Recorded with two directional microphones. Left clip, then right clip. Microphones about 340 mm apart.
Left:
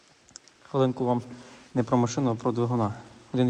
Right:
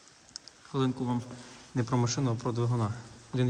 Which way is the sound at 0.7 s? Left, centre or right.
Centre.